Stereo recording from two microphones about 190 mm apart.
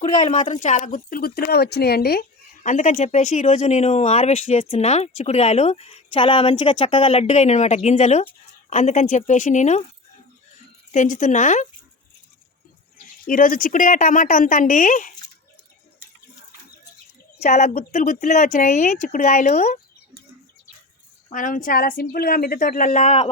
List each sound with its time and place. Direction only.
0.0 s speech: 40° left (ahead or behind)
2.6 s speech: 40° left (ahead or behind)
10.9 s speech: 40° left (ahead or behind)
13.2 s speech: 45° left (ahead or behind)
17.4 s speech: 35° left (ahead or behind)
21.3 s speech: 45° left (ahead or behind)